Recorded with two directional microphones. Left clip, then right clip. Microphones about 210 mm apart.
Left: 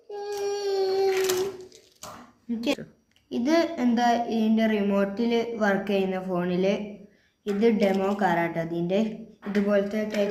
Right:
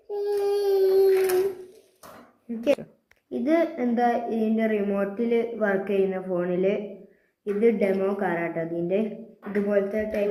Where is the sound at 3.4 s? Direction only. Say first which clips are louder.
Even; 35° left (ahead or behind).